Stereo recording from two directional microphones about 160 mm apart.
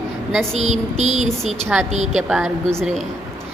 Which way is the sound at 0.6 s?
45° right (ahead or behind).